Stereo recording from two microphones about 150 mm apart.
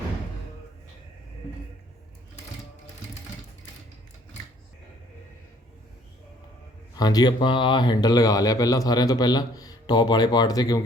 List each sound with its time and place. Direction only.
6.9 s speech: 25° left (ahead or behind)